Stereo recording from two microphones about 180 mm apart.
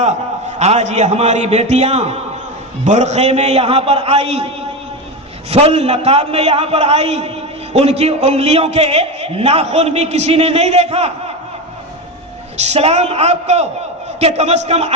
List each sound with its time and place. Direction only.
0.6 s a man's voice: 35° right (ahead or behind)
12.5 s a man's voice: 35° right (ahead or behind)